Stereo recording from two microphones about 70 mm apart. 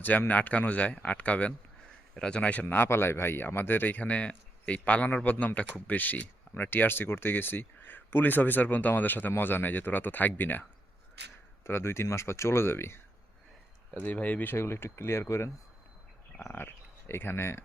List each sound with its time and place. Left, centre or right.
0.0 s speech: left
13.9 s speech: left